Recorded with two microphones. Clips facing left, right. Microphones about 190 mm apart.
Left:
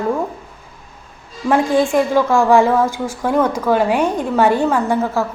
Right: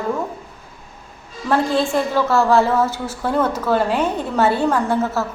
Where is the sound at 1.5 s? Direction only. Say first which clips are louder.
Left 3 dB; 15° left (ahead or behind).